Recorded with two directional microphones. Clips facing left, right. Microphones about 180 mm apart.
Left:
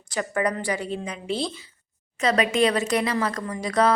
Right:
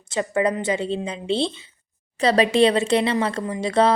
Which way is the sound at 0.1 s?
25° right (ahead or behind).